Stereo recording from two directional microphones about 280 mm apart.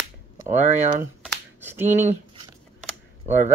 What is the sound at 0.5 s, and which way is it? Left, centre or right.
Speech, right.